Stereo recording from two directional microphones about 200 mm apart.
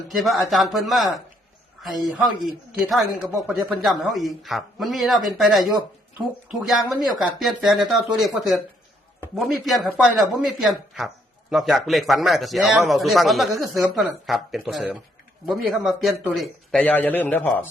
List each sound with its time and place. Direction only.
0.2 s a man's voice: centre (ahead or behind)